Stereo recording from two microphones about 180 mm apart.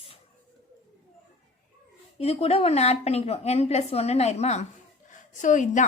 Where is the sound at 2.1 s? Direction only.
35° left (ahead or behind).